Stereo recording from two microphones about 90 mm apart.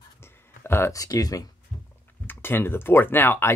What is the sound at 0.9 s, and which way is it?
Speech, 40° left (ahead or behind).